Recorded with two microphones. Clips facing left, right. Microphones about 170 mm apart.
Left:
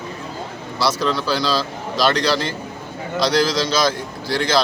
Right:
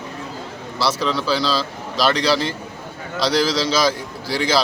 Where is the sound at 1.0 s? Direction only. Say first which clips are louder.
Even; 5° right (ahead or behind).